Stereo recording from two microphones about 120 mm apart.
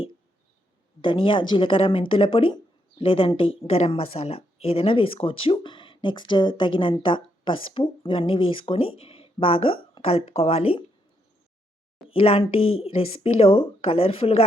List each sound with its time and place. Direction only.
1.0 s speech: 45° left (ahead or behind)
12.0 s speech: 50° left (ahead or behind)